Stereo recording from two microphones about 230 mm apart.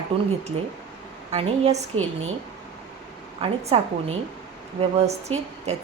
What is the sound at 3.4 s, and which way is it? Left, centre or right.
A woman's voice, right.